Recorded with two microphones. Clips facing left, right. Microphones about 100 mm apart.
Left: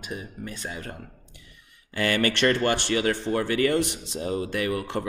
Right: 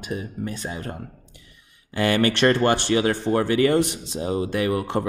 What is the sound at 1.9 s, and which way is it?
Speech, 25° right (ahead or behind).